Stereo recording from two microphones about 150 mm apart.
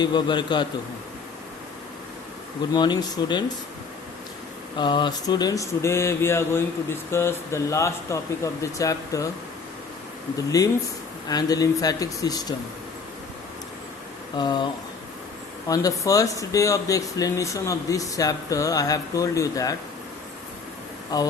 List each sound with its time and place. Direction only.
0.0 s a man's voice: 30° left (ahead or behind)
2.7 s speech: 30° left (ahead or behind)
4.8 s speech: 30° left (ahead or behind)
10.3 s speech: 25° left (ahead or behind)
14.3 s speech: 30° left (ahead or behind)
21.1 s speech: 25° left (ahead or behind)